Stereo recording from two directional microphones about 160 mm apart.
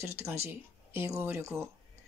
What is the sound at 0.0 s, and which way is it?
Speech, 15° right (ahead or behind).